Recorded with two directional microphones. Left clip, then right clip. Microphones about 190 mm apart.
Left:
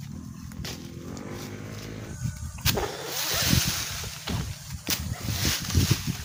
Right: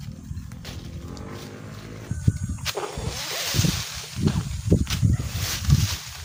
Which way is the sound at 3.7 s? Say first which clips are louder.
Even; 10° left (ahead or behind).